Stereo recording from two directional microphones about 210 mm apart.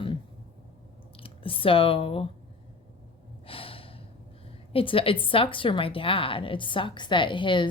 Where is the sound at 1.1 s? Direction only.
25° left (ahead or behind).